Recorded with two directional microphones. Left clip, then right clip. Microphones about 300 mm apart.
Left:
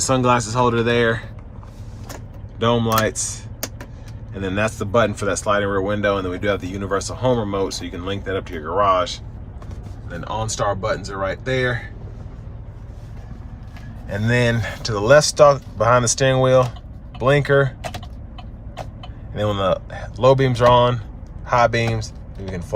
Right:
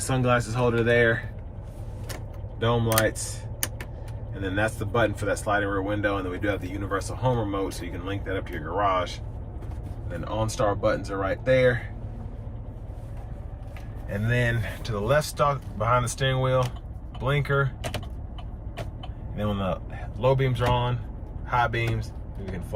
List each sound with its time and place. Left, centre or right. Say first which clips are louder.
0.1 s speech: left 6 dB; centre
2.6 s speech: left 6 dB; centre
4.4 s speech: left 5 dB; centre
10.2 s speech: left 4 dB; centre
14.1 s speech: left 7 dB; centre
19.5 s speech: left 10 dB; centre